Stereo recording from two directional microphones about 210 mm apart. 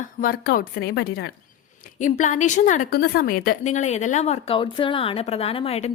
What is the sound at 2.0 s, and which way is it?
A woman's voice, 35° left (ahead or behind).